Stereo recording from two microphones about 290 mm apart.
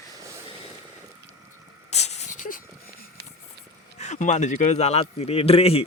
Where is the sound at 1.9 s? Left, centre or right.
Left.